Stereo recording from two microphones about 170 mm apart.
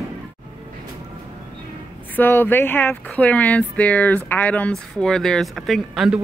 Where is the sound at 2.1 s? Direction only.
10° left (ahead or behind).